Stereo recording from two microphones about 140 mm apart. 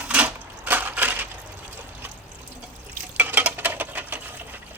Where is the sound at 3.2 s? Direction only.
10° right (ahead or behind).